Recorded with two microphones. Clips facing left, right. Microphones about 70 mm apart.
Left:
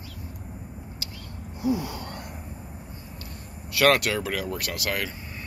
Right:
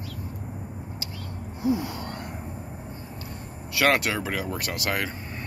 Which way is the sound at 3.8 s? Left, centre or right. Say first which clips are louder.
Left 2 dB; centre.